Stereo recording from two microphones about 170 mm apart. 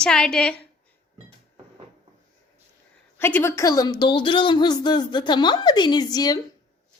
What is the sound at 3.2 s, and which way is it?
A woman's voice, 10° left (ahead or behind).